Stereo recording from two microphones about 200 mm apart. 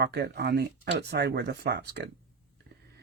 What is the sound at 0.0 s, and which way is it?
Speech, 55° right (ahead or behind).